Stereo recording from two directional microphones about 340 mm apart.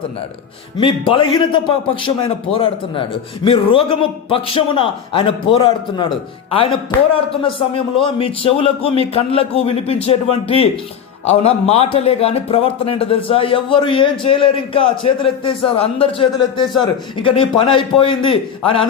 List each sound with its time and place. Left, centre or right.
0.8 s a man's voice: centre